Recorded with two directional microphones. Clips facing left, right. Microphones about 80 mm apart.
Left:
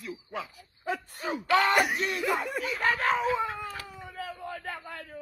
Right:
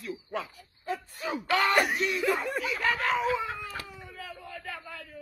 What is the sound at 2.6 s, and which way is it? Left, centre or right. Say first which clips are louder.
Speech: left 1 dB; left.